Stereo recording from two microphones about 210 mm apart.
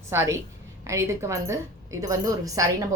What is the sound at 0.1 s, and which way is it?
A woman's voice, 10° right (ahead or behind).